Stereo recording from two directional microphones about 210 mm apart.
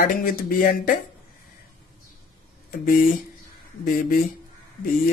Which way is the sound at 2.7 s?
45° left (ahead or behind).